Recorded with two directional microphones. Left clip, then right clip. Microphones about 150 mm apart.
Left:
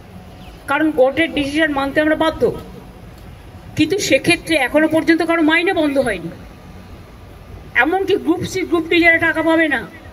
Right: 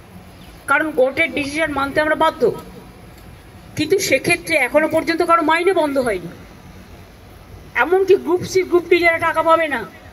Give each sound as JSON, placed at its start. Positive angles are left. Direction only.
{"t": 1.0, "sound": "a woman's voice", "side_deg": -20}
{"t": 3.7, "sound": "a woman's voice", "side_deg": -30}
{"t": 7.7, "sound": "a man's voice", "side_deg": -30}